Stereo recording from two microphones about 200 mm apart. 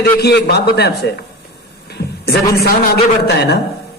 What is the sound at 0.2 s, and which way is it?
A man's voice, 55° left (ahead or behind).